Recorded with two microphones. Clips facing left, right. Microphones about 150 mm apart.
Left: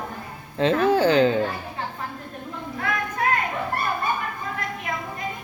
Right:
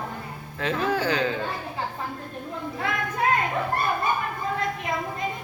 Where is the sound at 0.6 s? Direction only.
30° left (ahead or behind).